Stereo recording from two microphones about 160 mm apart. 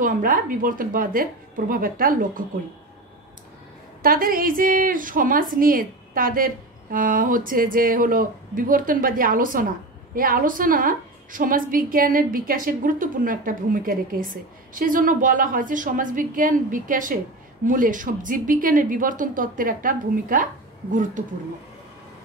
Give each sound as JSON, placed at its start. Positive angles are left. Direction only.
{"t": 0.0, "sound": "a woman's voice", "side_deg": -55}
{"t": 4.0, "sound": "a woman's voice", "side_deg": -60}